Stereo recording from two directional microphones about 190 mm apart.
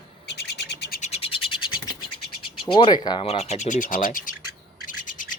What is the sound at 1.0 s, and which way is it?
Frog, 30° left (ahead or behind).